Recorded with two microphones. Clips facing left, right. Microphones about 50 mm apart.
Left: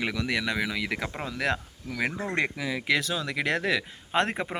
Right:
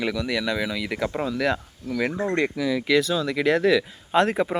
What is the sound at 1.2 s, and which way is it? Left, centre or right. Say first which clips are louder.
Speech: right 3 dB; left.